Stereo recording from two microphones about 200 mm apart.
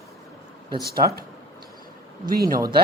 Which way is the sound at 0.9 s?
50° right (ahead or behind).